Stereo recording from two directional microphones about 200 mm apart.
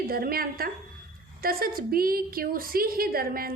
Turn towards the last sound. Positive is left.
turn(degrees=-45)  # may be behind; listen again after turning